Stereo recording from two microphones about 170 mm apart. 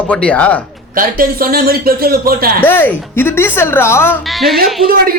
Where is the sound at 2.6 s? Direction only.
10° left (ahead or behind).